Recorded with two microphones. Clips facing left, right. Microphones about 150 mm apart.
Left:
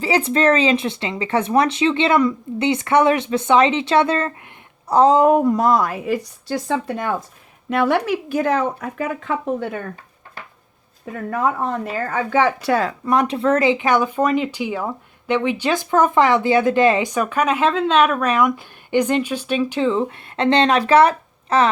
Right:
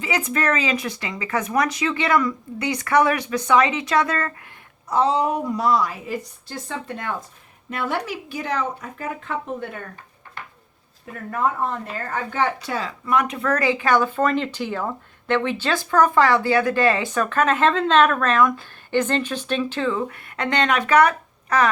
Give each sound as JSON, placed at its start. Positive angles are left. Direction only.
{"t": 0.0, "sound": "speech", "side_deg": 30}
{"t": 4.9, "sound": "a woman's voice", "side_deg": 40}
{"t": 6.1, "sound": "speech", "side_deg": 85}
{"t": 7.7, "sound": "speech", "side_deg": 70}
{"t": 8.8, "sound": "speech", "side_deg": 90}
{"t": 12.1, "sound": "speech", "side_deg": 90}
{"t": 13.1, "sound": "speech", "side_deg": 30}